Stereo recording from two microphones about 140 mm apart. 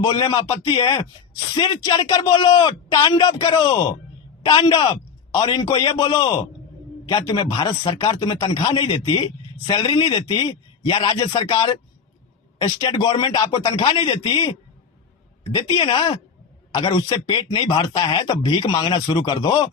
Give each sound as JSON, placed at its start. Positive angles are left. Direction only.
{"t": 0.0, "sound": "a man's voice", "side_deg": 30}
{"t": 11.4, "sound": "a man's voice", "side_deg": 25}
{"t": 15.5, "sound": "a man's voice", "side_deg": 30}